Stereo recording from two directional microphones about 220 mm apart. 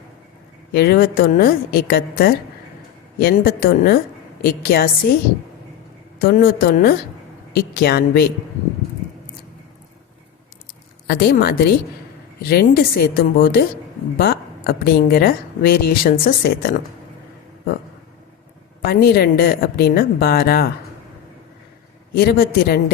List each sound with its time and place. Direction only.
0.7 s a woman's voice: 45° left (ahead or behind)
6.1 s a woman's voice: 45° left (ahead or behind)
11.0 s a woman's voice: 45° left (ahead or behind)
18.9 s a woman's voice: 45° left (ahead or behind)
22.1 s a woman's voice: 45° left (ahead or behind)